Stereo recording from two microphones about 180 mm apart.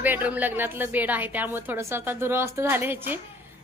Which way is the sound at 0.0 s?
10° right (ahead or behind).